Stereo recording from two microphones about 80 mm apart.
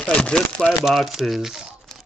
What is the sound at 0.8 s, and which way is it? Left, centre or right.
Speech, centre.